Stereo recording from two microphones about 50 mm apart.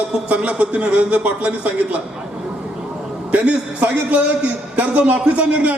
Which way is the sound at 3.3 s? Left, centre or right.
Right.